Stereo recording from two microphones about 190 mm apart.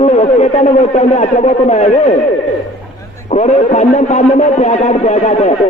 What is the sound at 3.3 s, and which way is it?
Speech, 35° left (ahead or behind).